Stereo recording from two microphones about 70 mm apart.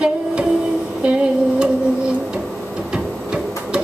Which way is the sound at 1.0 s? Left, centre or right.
Centre.